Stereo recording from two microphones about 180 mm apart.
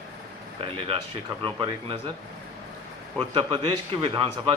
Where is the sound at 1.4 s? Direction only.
30° right (ahead or behind).